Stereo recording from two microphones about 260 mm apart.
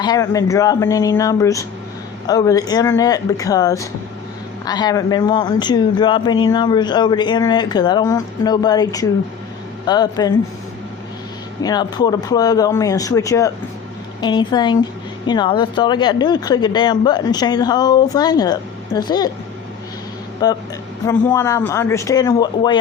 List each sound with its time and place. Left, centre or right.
0.0 s a man's voice: centre
11.6 s a man's voice: centre
20.4 s a man's voice: centre